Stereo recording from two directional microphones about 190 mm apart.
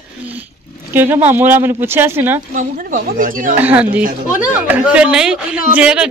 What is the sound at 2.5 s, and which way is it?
Speech, 45° right (ahead or behind).